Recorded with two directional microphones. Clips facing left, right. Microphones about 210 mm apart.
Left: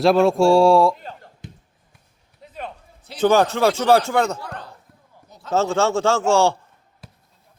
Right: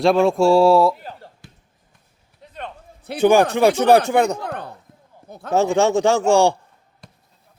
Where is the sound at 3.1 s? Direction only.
15° right (ahead or behind).